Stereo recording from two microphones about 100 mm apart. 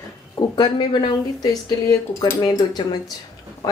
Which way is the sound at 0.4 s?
45° left (ahead or behind).